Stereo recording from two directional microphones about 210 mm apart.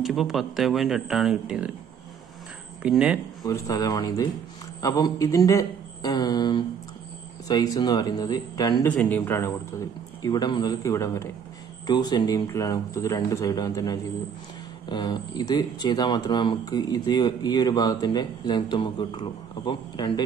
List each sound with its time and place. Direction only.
0.0 s speech: centre (ahead or behind)
2.8 s speech: 5° right (ahead or behind)
3.4 s a man's voice: 15° left (ahead or behind)
8.8 s a man's voice: 10° left (ahead or behind)